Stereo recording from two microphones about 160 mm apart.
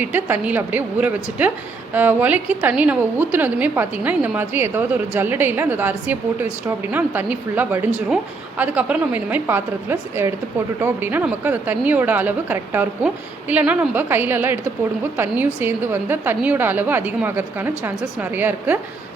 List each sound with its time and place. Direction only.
0.0 s a woman's voice: 10° right (ahead or behind)